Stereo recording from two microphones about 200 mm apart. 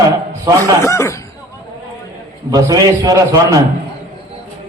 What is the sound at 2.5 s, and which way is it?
A man's voice, 15° right (ahead or behind).